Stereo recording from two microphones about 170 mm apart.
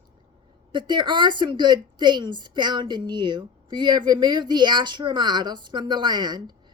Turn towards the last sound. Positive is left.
turn(degrees=-25)  # may be behind; listen again after turning